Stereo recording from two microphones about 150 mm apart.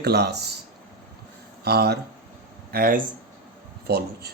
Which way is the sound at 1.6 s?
90° right.